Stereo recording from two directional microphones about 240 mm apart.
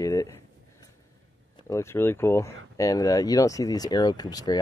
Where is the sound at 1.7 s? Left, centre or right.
Centre.